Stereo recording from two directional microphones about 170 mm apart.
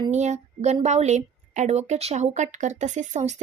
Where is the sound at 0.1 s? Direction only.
45° right (ahead or behind).